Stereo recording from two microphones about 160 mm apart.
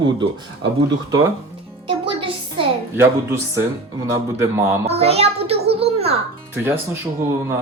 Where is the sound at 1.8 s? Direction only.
35° right (ahead or behind).